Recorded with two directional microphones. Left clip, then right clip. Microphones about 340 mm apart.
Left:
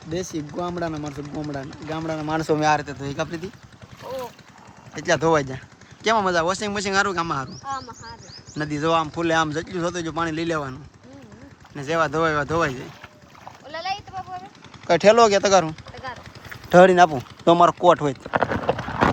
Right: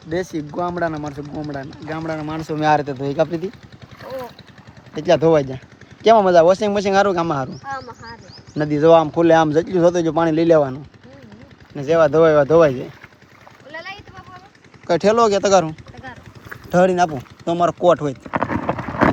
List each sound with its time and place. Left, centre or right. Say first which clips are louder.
0.1 s speech: right 5 dB; centre
1.2 s speech: right 2 dB; left
1.9 s speech: even; centre
4.9 s speech: right 5 dB; centre
7.5 s speech: right 2 dB; centre
8.5 s speech: right 9 dB; centre
13.7 s a sound: left 4 dB; centre
14.8 s speech: even; centre
15.7 s a sound: left 2 dB; left
16.6 s speech: left 3 dB; centre
18.2 s clip-clop: even; centre